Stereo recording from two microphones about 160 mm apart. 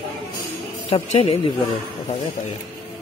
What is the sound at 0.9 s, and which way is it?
Speech, 35° left (ahead or behind).